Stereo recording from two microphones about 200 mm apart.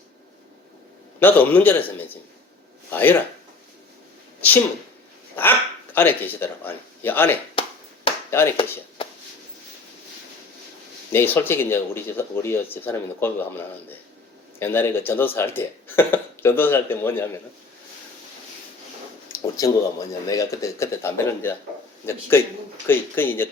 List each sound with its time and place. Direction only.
1.2 s speech: 10° left (ahead or behind)
4.4 s a sound: 10° left (ahead or behind)
5.4 s speech: 10° left (ahead or behind)
7.6 s finger snapping: 25° left (ahead or behind)
8.3 s speech: 15° left (ahead or behind)
9.0 s a sound: 25° left (ahead or behind)
11.1 s speech: 10° left (ahead or behind)
19.3 s speech: 15° left (ahead or behind)